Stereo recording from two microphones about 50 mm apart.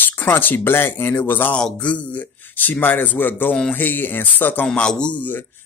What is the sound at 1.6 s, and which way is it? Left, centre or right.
Speech, centre.